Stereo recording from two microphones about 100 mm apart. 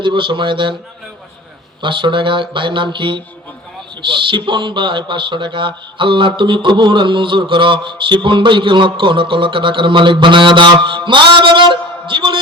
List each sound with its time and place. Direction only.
0.0 s a man's voice: 55° right (ahead or behind)
1.8 s a man's voice: 55° right (ahead or behind)